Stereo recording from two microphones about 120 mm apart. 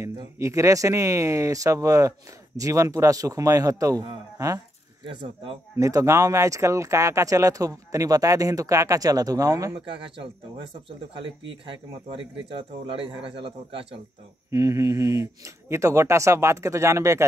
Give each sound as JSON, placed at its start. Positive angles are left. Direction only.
{"t": 0.4, "sound": "speech", "side_deg": -25}
{"t": 5.0, "sound": "a man's voice", "side_deg": -50}
{"t": 5.8, "sound": "speech", "side_deg": -25}
{"t": 9.8, "sound": "a man's voice", "side_deg": -45}
{"t": 11.6, "sound": "a man's voice", "side_deg": -45}
{"t": 14.5, "sound": "speech", "side_deg": -25}